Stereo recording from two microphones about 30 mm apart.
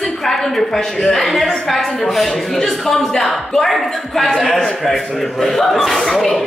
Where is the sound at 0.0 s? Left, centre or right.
Centre.